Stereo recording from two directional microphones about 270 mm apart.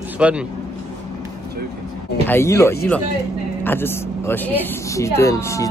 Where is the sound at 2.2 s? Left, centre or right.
Centre.